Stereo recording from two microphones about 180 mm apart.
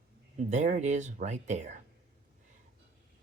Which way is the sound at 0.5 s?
40° right (ahead or behind).